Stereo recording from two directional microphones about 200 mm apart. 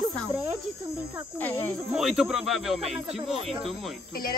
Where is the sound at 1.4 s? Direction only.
15° left (ahead or behind).